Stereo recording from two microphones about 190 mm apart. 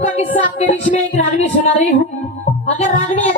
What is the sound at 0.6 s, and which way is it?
Speech, 35° left (ahead or behind).